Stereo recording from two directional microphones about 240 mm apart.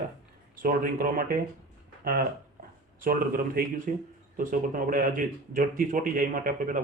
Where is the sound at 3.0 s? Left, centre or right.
Right.